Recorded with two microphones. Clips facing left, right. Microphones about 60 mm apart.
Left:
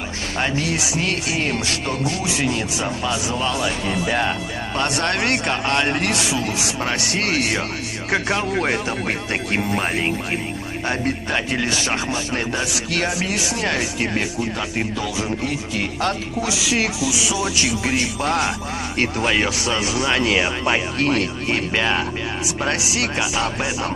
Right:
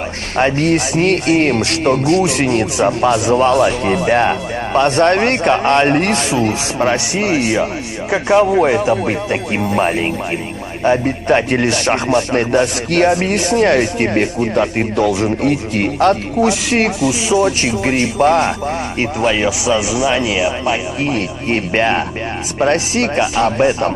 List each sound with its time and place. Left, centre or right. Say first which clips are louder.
0.4 s speech: right 9 dB; right
7.2 s speech: right 4 dB; centre
11.2 s speech: right 9 dB; right
11.6 s speech: right 7 dB; right
18.9 s speech: right 3 dB; centre
20.4 s speech: right 4 dB; left
21.2 s speech: right 4 dB; right